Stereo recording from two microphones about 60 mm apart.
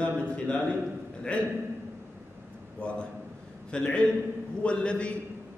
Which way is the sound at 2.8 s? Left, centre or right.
Centre.